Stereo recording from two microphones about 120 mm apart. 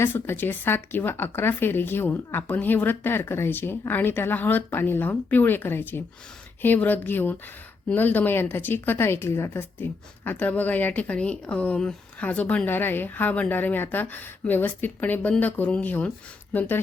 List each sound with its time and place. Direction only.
0.0 s a woman's voice: 15° left (ahead or behind)